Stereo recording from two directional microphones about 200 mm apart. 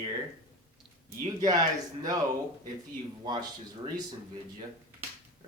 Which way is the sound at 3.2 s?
20° right (ahead or behind).